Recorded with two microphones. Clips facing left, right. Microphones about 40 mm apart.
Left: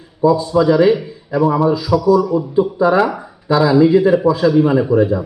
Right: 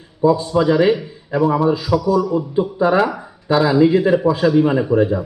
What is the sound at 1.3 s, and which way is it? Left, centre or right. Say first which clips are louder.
Speech: left 1 dB; right.